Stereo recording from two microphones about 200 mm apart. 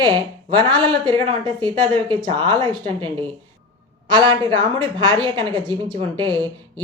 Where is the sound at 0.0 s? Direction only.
20° right (ahead or behind).